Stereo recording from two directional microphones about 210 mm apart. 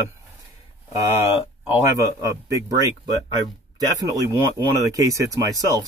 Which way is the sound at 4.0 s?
15° right (ahead or behind).